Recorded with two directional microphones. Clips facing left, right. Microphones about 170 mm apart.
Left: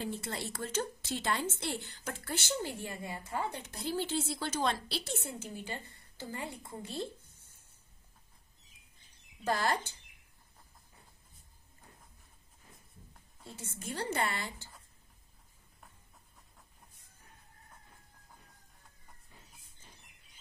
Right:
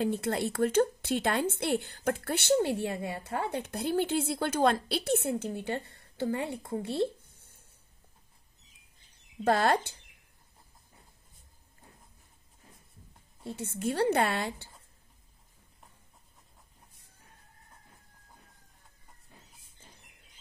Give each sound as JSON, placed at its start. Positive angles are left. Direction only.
{"t": 0.0, "sound": "a woman's voice", "side_deg": -60}
{"t": 9.4, "sound": "a woman's voice", "side_deg": -60}
{"t": 13.5, "sound": "a woman's voice", "side_deg": -60}